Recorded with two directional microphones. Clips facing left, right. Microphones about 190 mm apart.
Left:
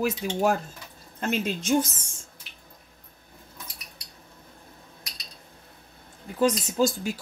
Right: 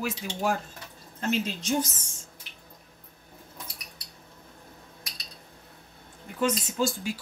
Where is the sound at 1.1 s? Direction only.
55° left (ahead or behind).